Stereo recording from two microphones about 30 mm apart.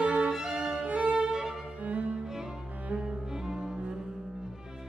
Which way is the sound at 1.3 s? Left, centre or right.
Right.